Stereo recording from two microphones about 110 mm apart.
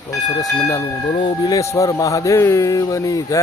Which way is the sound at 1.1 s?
45° left (ahead or behind).